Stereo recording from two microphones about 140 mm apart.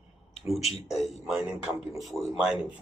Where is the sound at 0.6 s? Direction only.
50° left (ahead or behind).